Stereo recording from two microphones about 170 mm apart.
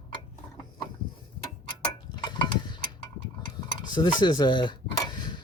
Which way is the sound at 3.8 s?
25° left (ahead or behind).